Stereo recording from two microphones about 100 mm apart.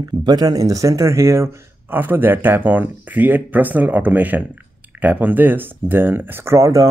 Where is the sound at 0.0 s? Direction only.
40° right (ahead or behind).